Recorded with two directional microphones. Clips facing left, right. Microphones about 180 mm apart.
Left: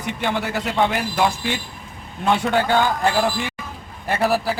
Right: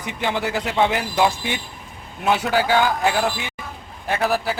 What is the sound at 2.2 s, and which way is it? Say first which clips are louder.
Speech: left 1 dB; 5° right (ahead or behind).